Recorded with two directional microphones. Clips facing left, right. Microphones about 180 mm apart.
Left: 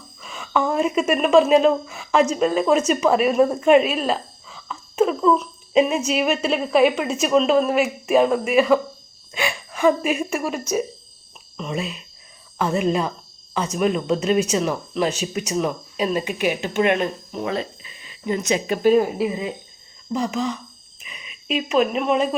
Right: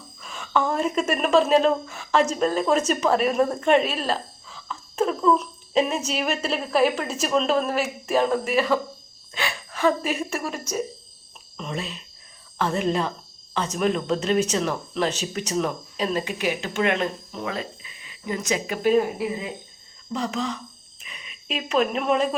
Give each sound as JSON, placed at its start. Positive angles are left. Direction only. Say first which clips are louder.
{"t": 0.2, "sound": "a woman's voice", "louder": "left 2 dB", "side_deg": 5}
{"t": 9.3, "sound": "a sound", "louder": "left 4 dB", "side_deg": 10}
{"t": 11.5, "sound": "speech", "louder": "left 4 dB", "side_deg": 5}
{"t": 18.8, "sound": "speech", "louder": "left 3 dB", "side_deg": 35}
{"t": 20.1, "sound": "speech", "louder": "left 4 dB", "side_deg": 10}